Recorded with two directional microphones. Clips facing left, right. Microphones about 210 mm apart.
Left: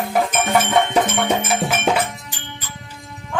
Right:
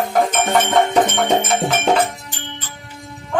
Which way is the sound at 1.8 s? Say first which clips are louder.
Right 3 dB; 10° left (ahead or behind).